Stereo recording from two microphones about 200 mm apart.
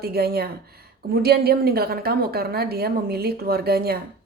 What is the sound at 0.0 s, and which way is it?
A woman's voice, 50° right (ahead or behind).